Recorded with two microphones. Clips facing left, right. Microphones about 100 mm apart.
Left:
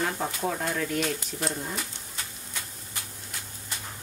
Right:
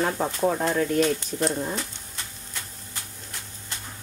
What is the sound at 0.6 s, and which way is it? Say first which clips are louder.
Speech: right 6 dB; 40° right (ahead or behind).